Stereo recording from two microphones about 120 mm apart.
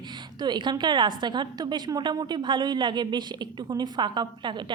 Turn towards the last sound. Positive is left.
turn(degrees=-40)  # may be behind; listen again after turning